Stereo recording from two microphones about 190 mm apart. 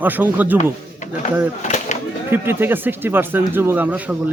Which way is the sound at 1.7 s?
35° left (ahead or behind).